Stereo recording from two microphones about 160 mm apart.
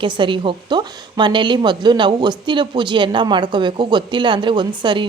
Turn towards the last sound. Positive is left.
turn(degrees=-30)  # may be behind; listen again after turning